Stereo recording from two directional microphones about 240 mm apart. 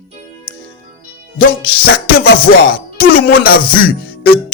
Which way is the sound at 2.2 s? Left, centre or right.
Left.